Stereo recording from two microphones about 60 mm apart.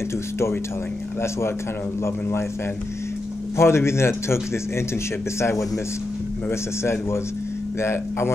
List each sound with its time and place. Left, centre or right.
2.0 s speech: left
3.5 s speech: left
6.5 s speech: left